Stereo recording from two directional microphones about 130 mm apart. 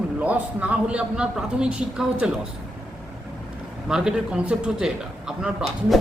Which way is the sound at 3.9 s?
5° right (ahead or behind).